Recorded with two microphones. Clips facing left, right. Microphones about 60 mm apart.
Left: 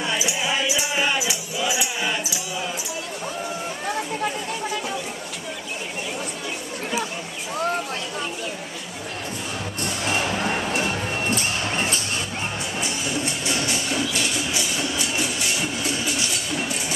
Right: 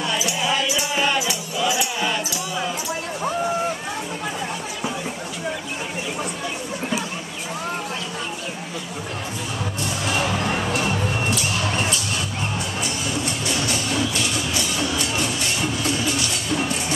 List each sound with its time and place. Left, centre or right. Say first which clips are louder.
0.0 s music: right 1 dB; centre
11.2 s music: right 1 dB; left
12.8 s music: left 1 dB; left; by 15.9 s centre